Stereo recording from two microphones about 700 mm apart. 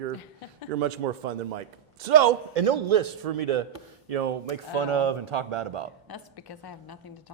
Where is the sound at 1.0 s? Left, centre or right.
Right.